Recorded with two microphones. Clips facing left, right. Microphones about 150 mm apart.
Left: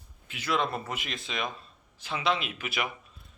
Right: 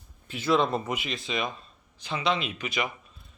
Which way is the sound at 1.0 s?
Centre (ahead or behind).